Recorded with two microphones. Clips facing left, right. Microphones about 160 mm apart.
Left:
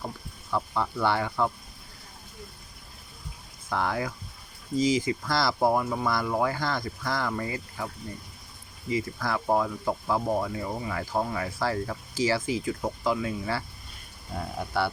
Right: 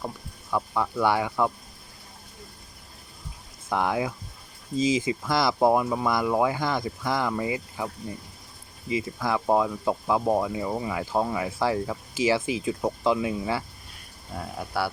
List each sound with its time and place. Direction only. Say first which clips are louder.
0.5 s speech: right 2 dB; 10° right (ahead or behind)
3.7 s speech: right 3 dB; 15° right (ahead or behind)
8.9 s speech: right 2 dB; 20° right (ahead or behind)
14.7 s speech: left 1 dB; 5° right (ahead or behind)